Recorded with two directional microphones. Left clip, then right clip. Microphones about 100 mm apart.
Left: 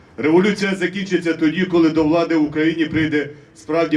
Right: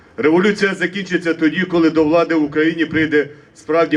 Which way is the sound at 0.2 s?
35° right (ahead or behind).